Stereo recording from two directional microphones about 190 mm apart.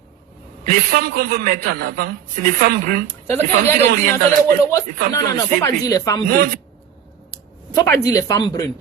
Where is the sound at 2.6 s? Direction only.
50° right (ahead or behind).